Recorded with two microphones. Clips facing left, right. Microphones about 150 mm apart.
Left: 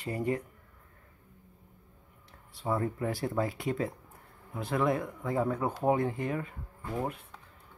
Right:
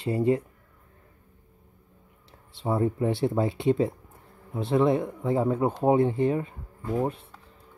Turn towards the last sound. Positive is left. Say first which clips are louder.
# right 7 dB
turn(degrees=-25)  # may be behind; listen again after turning